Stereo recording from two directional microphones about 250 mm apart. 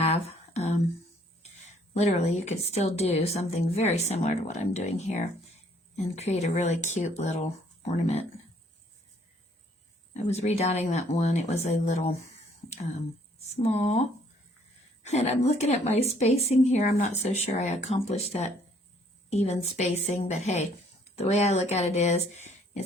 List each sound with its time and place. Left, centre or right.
0.3 s a sound: left
1.9 s a woman's voice: left
10.2 s a woman's voice: left
13.6 s a woman's voice: left